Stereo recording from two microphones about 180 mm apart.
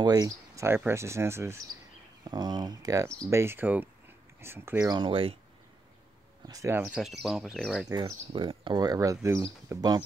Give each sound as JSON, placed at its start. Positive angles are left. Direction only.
{"t": 0.0, "sound": "speech", "side_deg": -20}
{"t": 4.9, "sound": "speech", "side_deg": -30}
{"t": 6.4, "sound": "speech", "side_deg": -20}
{"t": 6.8, "sound": "speech", "side_deg": 0}
{"t": 8.3, "sound": "speech", "side_deg": -30}